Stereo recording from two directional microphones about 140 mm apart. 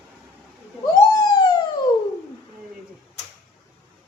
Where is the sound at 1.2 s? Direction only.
30° left (ahead or behind).